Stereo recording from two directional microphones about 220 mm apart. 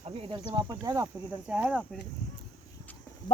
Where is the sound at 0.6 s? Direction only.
15° right (ahead or behind).